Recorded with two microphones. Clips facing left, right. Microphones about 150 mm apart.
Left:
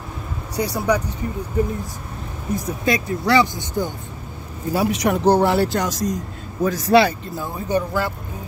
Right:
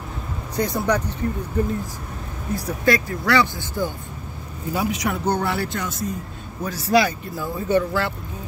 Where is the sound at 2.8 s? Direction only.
20° left (ahead or behind).